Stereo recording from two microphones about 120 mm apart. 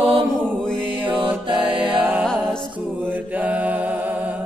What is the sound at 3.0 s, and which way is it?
Mantra, 15° right (ahead or behind).